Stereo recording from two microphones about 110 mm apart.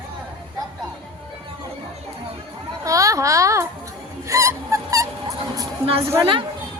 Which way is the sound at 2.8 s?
30° right (ahead or behind).